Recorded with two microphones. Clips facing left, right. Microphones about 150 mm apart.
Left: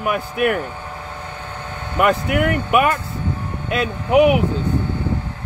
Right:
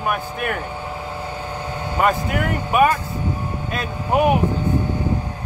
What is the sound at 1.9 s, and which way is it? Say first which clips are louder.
Speech: left 3 dB; 65° left (ahead or behind).